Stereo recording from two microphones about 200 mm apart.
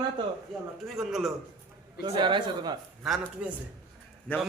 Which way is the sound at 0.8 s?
Centre (ahead or behind).